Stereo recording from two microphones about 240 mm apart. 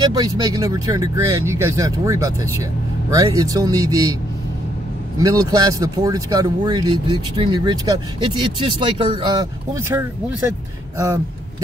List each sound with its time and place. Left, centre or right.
0.0 s speech: centre
5.2 s speech: centre